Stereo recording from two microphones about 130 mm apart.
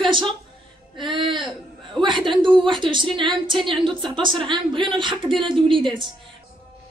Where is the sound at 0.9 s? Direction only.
40° right (ahead or behind).